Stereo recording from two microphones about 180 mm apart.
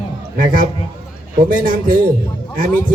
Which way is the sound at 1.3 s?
50° right (ahead or behind).